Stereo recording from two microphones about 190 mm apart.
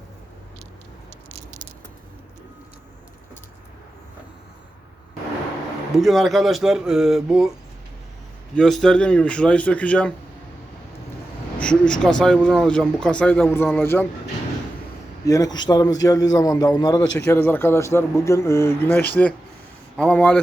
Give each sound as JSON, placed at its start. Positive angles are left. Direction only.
{"t": 6.0, "sound": "speech", "side_deg": 0}
{"t": 8.5, "sound": "speech", "side_deg": 5}
{"t": 11.6, "sound": "a man's voice", "side_deg": 5}
{"t": 15.2, "sound": "a man's voice", "side_deg": 20}